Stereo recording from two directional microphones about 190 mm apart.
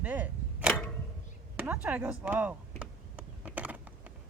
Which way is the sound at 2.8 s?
5° right (ahead or behind).